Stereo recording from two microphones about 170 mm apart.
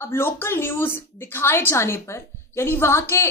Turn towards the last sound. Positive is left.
turn(degrees=15)  # may be behind; listen again after turning